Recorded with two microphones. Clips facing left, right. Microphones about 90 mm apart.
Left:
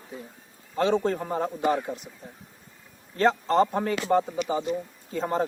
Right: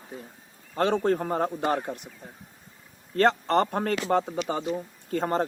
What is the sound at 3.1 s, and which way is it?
Speech, 65° right (ahead or behind).